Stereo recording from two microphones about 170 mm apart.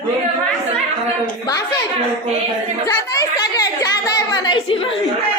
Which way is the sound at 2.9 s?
25° left (ahead or behind).